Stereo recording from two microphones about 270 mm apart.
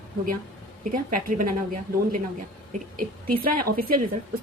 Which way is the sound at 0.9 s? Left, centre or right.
Right.